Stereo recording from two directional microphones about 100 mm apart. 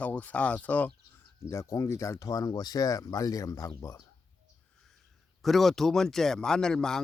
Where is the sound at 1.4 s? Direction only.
30° left (ahead or behind).